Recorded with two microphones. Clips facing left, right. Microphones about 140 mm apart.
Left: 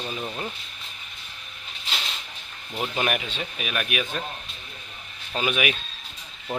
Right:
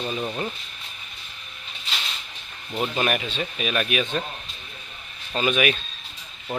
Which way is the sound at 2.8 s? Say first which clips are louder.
Right 2 dB; 10° left (ahead or behind).